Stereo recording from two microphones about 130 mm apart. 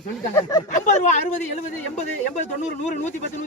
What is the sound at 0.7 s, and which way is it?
Speech, 70° left (ahead or behind).